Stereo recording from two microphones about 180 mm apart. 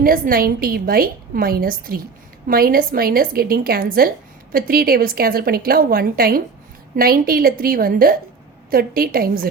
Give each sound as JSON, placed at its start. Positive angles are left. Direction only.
{"t": 0.0, "sound": "a woman's voice", "side_deg": -55}